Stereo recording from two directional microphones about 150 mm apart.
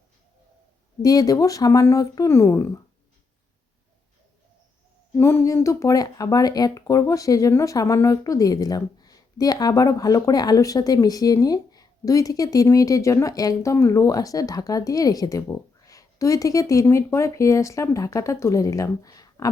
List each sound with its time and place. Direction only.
1.0 s speech: 25° left (ahead or behind)
5.1 s speech: 15° left (ahead or behind)